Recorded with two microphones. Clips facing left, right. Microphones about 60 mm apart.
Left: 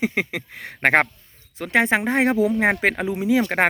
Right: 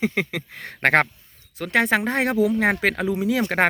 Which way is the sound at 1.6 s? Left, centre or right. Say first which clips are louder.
Left 1 dB; left.